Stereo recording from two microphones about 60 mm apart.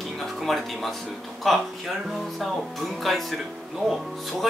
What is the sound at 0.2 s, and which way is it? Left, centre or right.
Speech, centre.